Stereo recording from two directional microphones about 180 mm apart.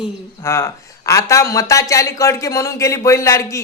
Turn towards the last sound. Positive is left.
turn(degrees=15)  # may be behind; listen again after turning